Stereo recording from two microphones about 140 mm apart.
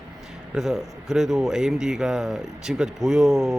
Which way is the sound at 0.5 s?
5° right (ahead or behind).